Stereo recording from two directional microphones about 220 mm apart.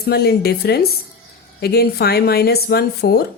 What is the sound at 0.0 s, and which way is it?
Speech, 45° left (ahead or behind).